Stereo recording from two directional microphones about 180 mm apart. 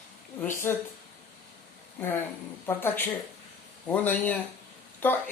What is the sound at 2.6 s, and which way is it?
A woman's voice, 10° left (ahead or behind).